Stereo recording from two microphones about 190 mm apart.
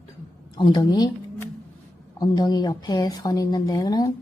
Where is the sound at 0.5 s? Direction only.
25° left (ahead or behind).